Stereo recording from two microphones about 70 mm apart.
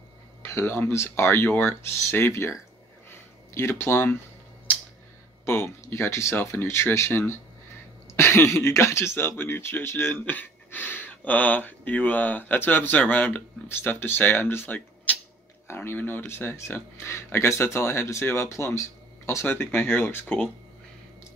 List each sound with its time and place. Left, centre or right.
0.4 s speech: left
3.1 s a sound: left
5.4 s speech: left